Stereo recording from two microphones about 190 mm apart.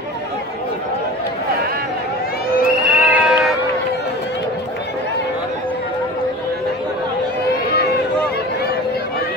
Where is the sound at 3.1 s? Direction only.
5° right (ahead or behind).